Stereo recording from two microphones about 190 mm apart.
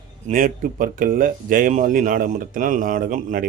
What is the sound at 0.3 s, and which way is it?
Speech, 45° right (ahead or behind).